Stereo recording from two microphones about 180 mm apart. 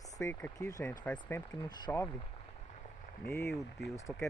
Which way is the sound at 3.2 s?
15° left (ahead or behind).